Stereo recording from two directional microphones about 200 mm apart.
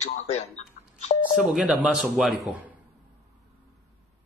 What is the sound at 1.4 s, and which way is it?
Speech, 5° right (ahead or behind).